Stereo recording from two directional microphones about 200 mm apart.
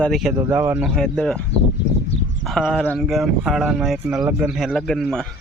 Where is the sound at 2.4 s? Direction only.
Centre (ahead or behind).